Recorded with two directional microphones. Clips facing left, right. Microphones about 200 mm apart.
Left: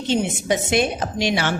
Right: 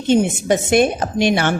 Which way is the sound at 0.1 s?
50° right (ahead or behind).